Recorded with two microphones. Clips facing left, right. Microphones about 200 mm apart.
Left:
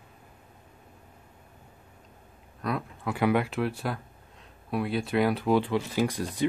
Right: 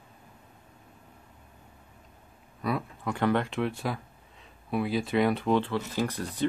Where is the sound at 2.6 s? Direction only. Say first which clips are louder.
Right 1 dB; centre (ahead or behind).